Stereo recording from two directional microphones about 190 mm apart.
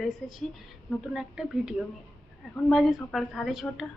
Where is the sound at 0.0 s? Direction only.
Centre (ahead or behind).